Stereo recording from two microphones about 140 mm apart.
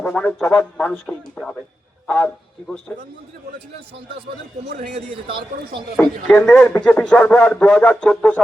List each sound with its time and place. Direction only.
0.0 s speech: 5° left (ahead or behind)
5.1 s speech: 35° right (ahead or behind)
6.0 s speech: 10° left (ahead or behind)